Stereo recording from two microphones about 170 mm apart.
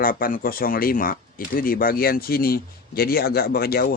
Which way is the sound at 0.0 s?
55° left (ahead or behind).